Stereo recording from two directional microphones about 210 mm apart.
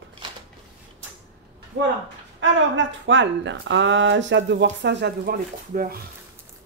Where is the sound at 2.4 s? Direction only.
65° right (ahead or behind); by 5.9 s 45° right (ahead or behind).